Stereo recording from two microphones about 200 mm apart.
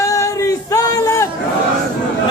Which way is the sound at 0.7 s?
20° left (ahead or behind).